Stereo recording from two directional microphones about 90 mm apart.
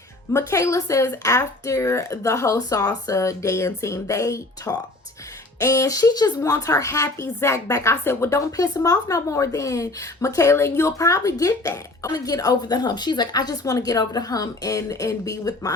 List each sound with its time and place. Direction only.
0.3 s a woman's voice: 35° left (ahead or behind)
2.6 s a woman's voice: 45° left (ahead or behind); by 8.4 s 25° left (ahead or behind)
8.5 s a woman's voice: 45° left (ahead or behind)